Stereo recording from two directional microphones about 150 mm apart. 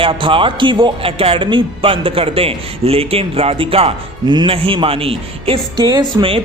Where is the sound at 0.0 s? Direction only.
35° right (ahead or behind).